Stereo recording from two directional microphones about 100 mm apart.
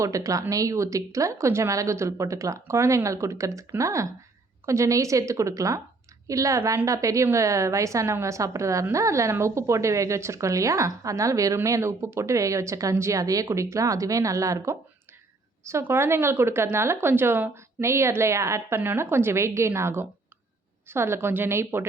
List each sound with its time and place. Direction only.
0.0 s a woman's voice: 30° right (ahead or behind)